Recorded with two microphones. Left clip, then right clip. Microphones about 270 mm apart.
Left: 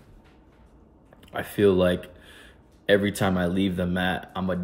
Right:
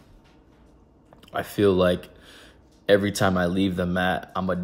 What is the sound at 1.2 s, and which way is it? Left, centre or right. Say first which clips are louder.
Speech: even; centre.